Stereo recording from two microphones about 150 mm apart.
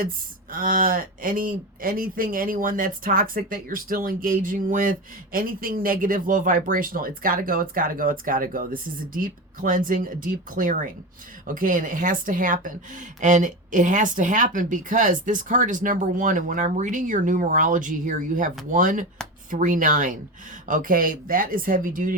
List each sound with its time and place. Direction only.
0.5 s speech: 65° right (ahead or behind)